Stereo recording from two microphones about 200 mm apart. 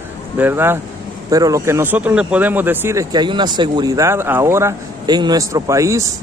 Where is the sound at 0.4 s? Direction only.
10° right (ahead or behind).